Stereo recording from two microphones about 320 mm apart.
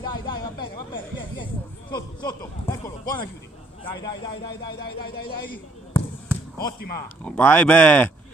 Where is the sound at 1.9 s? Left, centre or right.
Centre.